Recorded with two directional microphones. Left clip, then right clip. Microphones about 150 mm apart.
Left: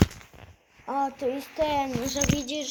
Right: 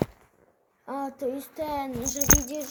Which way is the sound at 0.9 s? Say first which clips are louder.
Left 4 dB; 20° right (ahead or behind).